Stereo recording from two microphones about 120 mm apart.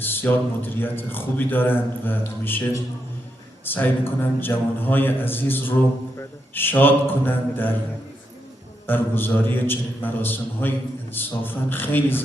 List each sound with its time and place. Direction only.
0.0 s a man's voice: 15° left (ahead or behind)
8.9 s a man's voice: 15° left (ahead or behind)